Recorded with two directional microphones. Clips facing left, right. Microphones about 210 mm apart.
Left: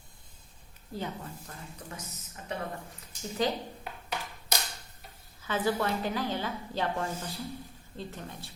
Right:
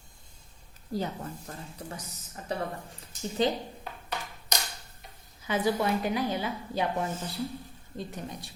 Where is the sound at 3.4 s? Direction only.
25° right (ahead or behind).